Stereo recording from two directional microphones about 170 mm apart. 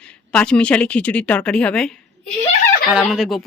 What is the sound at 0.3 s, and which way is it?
A woman's voice, 5° left (ahead or behind).